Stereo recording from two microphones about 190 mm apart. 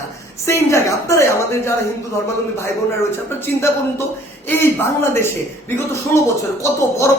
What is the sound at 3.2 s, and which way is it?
Speech, 10° left (ahead or behind).